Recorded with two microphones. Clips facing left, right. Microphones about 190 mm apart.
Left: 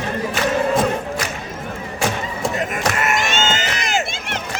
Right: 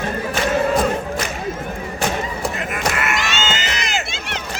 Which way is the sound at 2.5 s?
40° left (ahead or behind).